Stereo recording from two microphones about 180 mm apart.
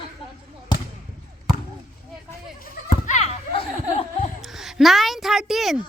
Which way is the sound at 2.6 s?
40° left (ahead or behind).